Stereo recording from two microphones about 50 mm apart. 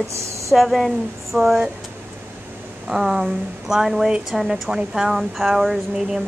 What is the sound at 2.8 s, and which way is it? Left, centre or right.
Speech, centre.